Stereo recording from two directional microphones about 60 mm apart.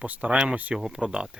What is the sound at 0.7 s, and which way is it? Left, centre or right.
Speech, centre.